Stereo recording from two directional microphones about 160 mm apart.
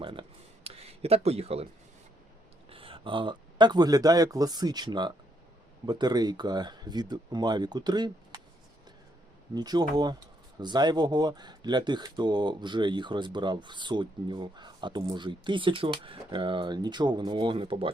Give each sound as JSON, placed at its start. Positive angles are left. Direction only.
{"t": 0.0, "sound": "a sound", "side_deg": -35}
{"t": 2.6, "sound": "speech", "side_deg": -35}
{"t": 9.6, "sound": "speech", "side_deg": -25}